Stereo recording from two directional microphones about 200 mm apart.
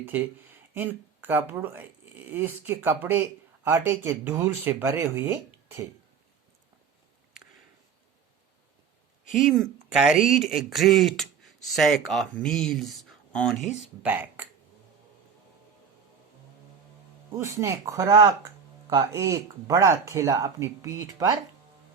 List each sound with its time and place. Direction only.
0.0 s speech: 10° right (ahead or behind)
9.5 s speech: centre (ahead or behind)
17.3 s speech: 15° right (ahead or behind)